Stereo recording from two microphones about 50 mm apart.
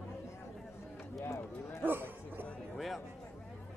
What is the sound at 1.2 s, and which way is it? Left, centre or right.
Run, left.